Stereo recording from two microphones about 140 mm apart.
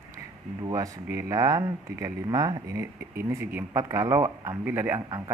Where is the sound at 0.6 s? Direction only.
25° right (ahead or behind).